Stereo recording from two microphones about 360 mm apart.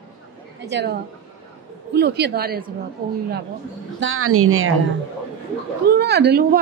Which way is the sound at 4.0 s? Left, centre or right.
Right.